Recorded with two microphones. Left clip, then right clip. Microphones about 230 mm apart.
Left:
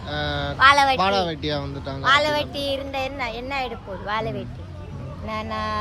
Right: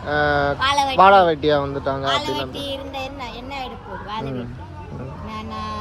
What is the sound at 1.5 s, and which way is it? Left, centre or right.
Speech, right.